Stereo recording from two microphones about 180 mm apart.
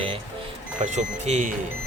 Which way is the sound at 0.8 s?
40° right (ahead or behind).